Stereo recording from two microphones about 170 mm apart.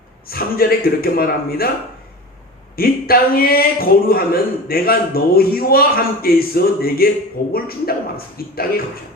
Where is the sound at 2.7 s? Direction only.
60° left (ahead or behind).